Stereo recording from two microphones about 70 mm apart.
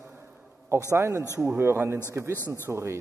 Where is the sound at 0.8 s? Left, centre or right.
Right.